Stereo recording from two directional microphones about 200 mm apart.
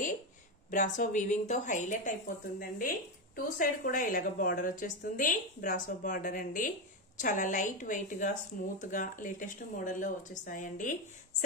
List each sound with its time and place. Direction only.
0.7 s speech: 40° left (ahead or behind)